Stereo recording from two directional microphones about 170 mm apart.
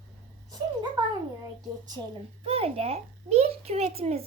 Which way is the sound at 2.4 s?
35° right (ahead or behind).